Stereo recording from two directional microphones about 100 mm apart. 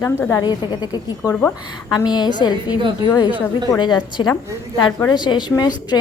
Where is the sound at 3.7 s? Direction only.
50° left (ahead or behind).